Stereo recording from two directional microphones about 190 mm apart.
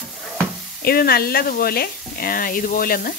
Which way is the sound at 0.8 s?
55° left (ahead or behind).